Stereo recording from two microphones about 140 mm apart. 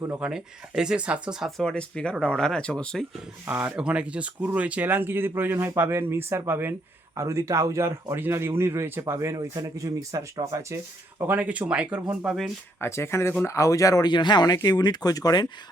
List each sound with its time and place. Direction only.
0.2 s speech: 5° right (ahead or behind)
3.4 s a man's voice: 10° right (ahead or behind)
11.2 s speech: 10° right (ahead or behind)
12.8 s speech: 20° left (ahead or behind)